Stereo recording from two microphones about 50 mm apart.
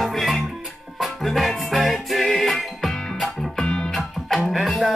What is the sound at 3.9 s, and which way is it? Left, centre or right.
Music, centre.